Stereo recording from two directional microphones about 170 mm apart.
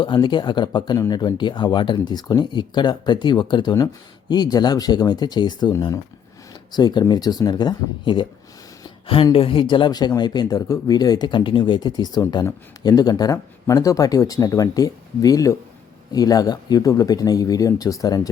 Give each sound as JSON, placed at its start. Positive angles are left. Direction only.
{"t": 0.0, "sound": "speech", "side_deg": 30}